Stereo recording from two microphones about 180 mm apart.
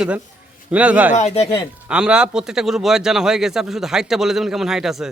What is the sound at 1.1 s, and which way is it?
Speech, 35° left (ahead or behind).